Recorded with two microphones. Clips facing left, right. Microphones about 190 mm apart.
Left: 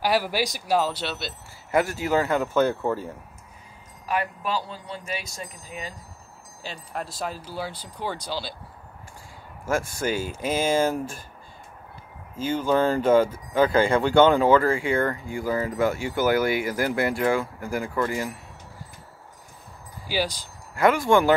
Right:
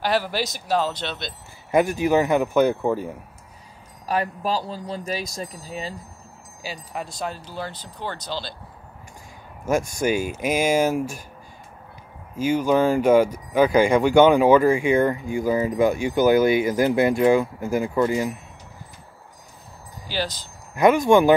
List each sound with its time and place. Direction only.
0.0 s speech: 10° left (ahead or behind)
1.7 s speech: 20° right (ahead or behind)
4.0 s speech: 35° right (ahead or behind)
6.6 s speech: 5° right (ahead or behind)
9.7 s speech: 15° right (ahead or behind)
12.4 s speech: 10° right (ahead or behind)
20.1 s speech: 10° left (ahead or behind)
20.7 s speech: 20° right (ahead or behind)